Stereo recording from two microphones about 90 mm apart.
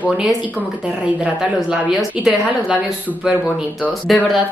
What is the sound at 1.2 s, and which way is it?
Speech, 15° right (ahead or behind).